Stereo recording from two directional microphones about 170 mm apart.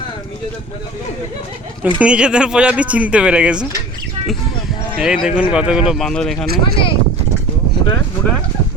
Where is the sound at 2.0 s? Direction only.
5° right (ahead or behind).